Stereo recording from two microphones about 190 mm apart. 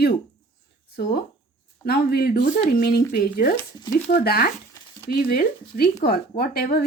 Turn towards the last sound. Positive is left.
turn(degrees=55)  # may be behind; listen again after turning